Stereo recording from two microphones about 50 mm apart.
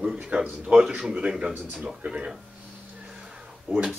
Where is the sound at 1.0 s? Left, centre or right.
Centre.